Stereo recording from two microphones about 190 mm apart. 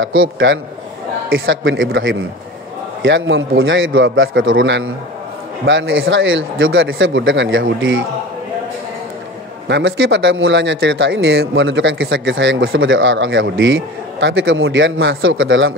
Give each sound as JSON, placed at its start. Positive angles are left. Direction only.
{"t": 0.0, "sound": "speech", "side_deg": -90}
{"t": 3.0, "sound": "speech", "side_deg": -75}
{"t": 9.7, "sound": "a man's voice", "side_deg": -70}